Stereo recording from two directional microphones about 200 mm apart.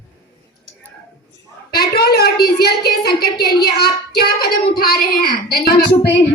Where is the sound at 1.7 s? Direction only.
50° left (ahead or behind).